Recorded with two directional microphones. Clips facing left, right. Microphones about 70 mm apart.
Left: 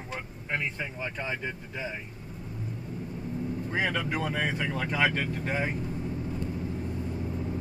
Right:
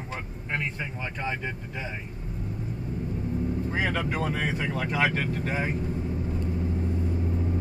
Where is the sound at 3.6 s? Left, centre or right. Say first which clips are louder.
Right 1 dB; centre.